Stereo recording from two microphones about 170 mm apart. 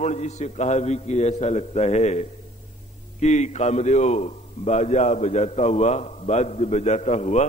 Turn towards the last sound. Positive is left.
turn(degrees=40)  # may be behind; listen again after turning